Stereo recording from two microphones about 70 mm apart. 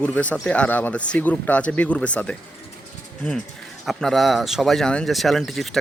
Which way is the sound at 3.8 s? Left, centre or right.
Centre.